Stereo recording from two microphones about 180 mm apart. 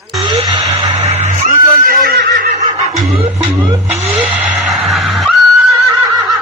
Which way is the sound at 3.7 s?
10° right (ahead or behind).